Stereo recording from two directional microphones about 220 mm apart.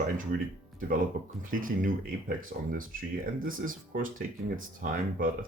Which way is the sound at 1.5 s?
40° right (ahead or behind).